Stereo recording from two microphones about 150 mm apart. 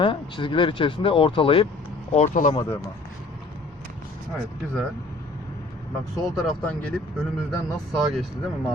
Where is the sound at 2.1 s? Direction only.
50° left (ahead or behind).